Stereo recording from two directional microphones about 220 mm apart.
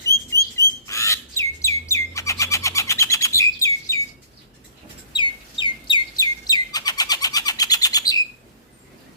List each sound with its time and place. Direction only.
0.1 s rodents: 15° right (ahead or behind)
0.9 s bird: 15° left (ahead or behind)
5.1 s bird: 20° left (ahead or behind)